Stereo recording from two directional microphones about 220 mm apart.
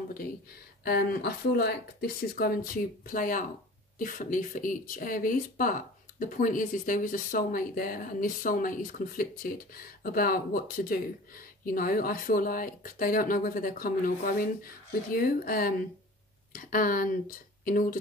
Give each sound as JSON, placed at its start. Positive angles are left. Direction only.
{"t": 0.8, "sound": "speech", "side_deg": 45}